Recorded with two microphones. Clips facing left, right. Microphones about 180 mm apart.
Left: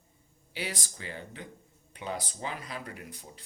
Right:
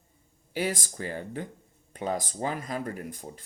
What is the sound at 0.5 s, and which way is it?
Speech, 50° right (ahead or behind).